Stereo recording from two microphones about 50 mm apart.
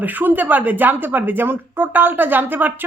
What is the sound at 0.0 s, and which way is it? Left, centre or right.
A woman's voice, right.